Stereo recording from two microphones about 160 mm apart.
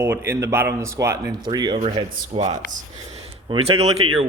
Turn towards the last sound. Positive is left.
turn(degrees=-40)  # may be behind; listen again after turning